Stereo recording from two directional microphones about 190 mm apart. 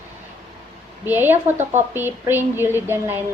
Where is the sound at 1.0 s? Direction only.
10° right (ahead or behind).